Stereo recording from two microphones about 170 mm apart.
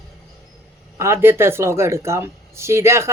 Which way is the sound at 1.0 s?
15° right (ahead or behind).